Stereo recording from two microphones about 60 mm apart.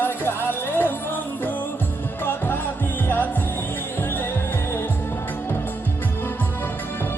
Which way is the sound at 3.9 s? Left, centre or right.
Left.